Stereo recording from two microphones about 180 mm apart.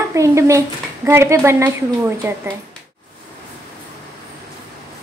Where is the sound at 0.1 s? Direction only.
15° right (ahead or behind).